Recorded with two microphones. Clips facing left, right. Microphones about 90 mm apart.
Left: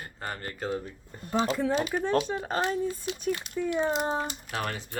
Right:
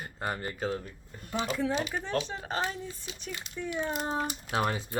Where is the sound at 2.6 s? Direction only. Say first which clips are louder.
Left 6 dB; 60° left (ahead or behind).